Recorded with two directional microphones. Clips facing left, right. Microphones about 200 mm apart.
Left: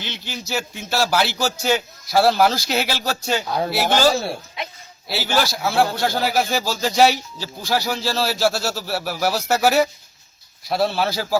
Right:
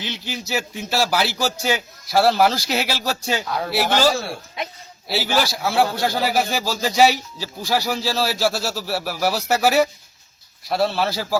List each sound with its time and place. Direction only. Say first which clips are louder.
0.0 s speech: right 2 dB; centre (ahead or behind)